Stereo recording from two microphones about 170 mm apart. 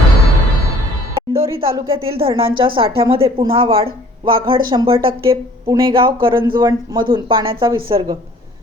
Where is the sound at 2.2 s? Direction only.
30° right (ahead or behind).